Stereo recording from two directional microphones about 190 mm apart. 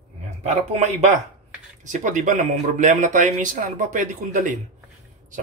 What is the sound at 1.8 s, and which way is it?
Speech, 40° right (ahead or behind).